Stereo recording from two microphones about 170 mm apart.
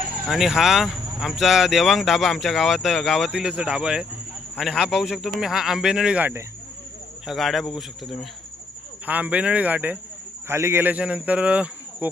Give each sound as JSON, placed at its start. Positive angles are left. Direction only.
{"t": 0.3, "sound": "speech", "side_deg": 0}